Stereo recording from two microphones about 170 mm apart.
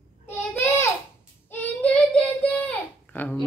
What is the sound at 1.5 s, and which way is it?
Child singing, 10° left (ahead or behind).